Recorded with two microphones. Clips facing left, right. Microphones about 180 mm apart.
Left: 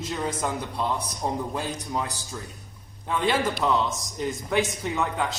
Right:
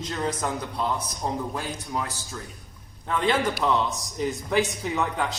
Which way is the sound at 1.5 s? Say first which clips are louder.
Left 1 dB; 15° left (ahead or behind).